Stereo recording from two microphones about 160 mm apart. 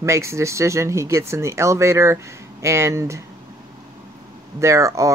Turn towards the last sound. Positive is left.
turn(degrees=-20)  # may be behind; listen again after turning